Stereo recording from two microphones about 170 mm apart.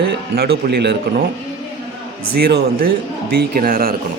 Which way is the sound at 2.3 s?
70° right (ahead or behind).